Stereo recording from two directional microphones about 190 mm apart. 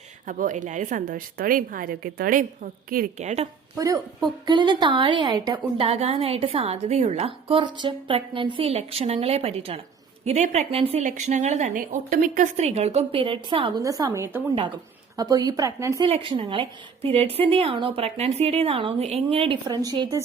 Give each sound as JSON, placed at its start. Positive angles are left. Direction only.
{"t": 0.3, "sound": "a woman's voice", "side_deg": -45}
{"t": 4.4, "sound": "a woman's voice", "side_deg": -25}
{"t": 16.0, "sound": "a woman's voice", "side_deg": -30}